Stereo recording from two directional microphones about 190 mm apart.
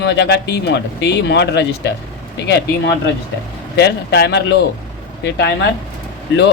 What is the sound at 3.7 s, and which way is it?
Speech, 60° left (ahead or behind).